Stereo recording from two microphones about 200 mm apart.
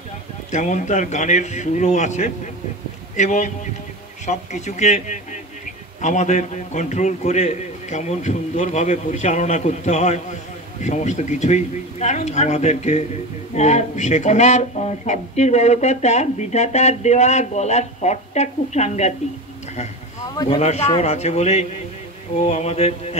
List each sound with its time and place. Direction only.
0.5 s speech: 35° left (ahead or behind)
20.4 s speech: 30° left (ahead or behind)